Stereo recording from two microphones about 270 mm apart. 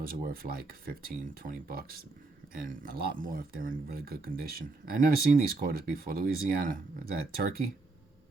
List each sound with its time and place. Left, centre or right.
0.0 s speech: right